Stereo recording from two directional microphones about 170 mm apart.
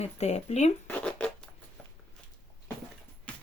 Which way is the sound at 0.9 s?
5° left (ahead or behind).